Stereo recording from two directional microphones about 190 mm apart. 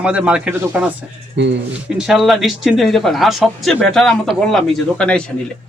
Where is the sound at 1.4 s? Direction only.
65° right (ahead or behind).